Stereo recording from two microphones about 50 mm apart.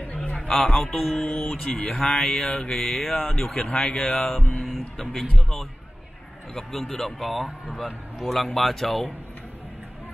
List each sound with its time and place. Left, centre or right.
0.1 s a sound: left
0.4 s a sound: centre
0.7 s speech: centre
3.3 s speech: left
4.6 s music: centre
6.5 s speech: centre